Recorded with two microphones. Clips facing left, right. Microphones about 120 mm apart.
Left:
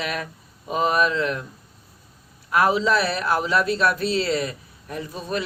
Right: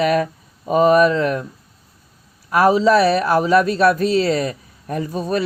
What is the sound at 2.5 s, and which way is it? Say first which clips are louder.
A man's voice: right 6 dB; 40° right (ahead or behind).